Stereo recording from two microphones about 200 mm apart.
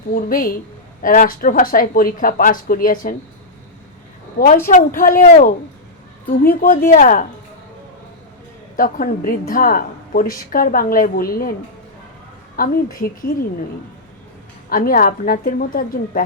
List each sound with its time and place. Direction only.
0.1 s a woman's voice: 45° left (ahead or behind)
4.6 s a woman's voice: 45° left (ahead or behind)
8.7 s a woman's voice: 45° left (ahead or behind)
12.5 s a woman's voice: 45° left (ahead or behind)
14.7 s a woman's voice: 45° left (ahead or behind)